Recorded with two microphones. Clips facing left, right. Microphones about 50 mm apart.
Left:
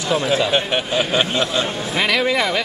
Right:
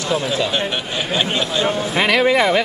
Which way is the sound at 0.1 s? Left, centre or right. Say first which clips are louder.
Left 3 dB; centre.